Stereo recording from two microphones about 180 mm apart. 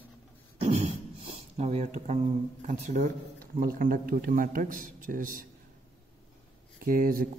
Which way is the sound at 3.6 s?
50° right (ahead or behind).